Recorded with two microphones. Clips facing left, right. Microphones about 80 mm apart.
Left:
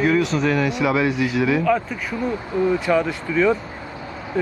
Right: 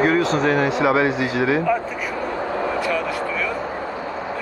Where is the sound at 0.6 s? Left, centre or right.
Right.